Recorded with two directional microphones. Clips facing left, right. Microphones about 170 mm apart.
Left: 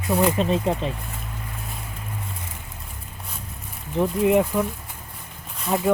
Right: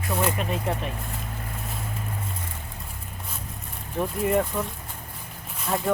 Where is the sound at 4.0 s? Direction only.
15° left (ahead or behind).